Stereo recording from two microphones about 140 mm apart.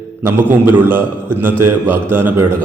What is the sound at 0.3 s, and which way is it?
A man's voice, 15° right (ahead or behind).